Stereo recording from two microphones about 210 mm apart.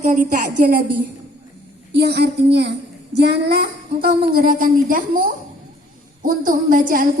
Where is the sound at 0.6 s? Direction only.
45° right (ahead or behind).